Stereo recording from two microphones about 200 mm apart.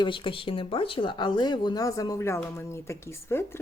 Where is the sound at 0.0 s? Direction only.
25° left (ahead or behind).